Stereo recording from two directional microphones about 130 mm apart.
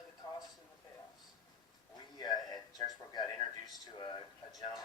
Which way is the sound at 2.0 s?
30° left (ahead or behind).